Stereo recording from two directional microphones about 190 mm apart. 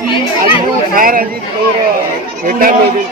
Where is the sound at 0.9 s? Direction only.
50° right (ahead or behind).